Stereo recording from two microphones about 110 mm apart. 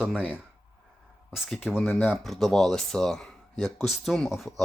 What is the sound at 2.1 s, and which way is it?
Speech, 5° left (ahead or behind).